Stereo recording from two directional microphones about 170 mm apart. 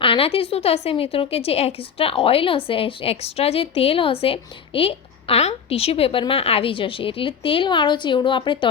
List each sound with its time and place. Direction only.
0.0 s a woman's voice: 30° left (ahead or behind)